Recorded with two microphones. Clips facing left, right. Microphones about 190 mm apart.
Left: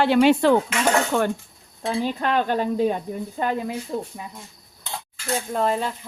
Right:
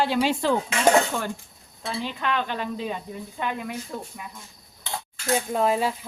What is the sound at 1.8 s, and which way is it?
Speech, 40° left (ahead or behind).